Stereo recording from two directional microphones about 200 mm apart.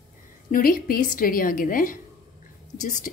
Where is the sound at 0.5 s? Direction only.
45° left (ahead or behind).